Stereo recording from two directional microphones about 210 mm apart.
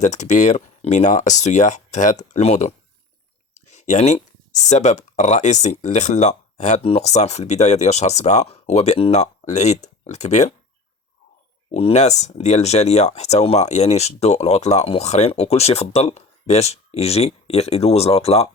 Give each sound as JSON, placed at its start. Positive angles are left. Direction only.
{"t": 0.0, "sound": "speech", "side_deg": 35}
{"t": 11.7, "sound": "speech", "side_deg": 30}